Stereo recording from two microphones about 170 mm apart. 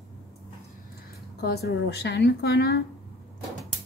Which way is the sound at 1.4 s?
70° left (ahead or behind).